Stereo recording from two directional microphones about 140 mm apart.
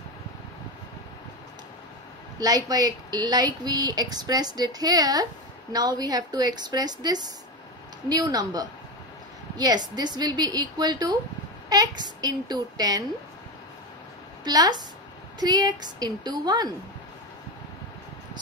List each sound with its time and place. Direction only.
2.3 s a woman's voice: 25° right (ahead or behind)
14.4 s a woman's voice: 30° right (ahead or behind)